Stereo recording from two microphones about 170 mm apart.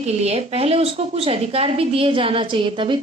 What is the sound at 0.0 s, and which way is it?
A woman's voice, 40° right (ahead or behind).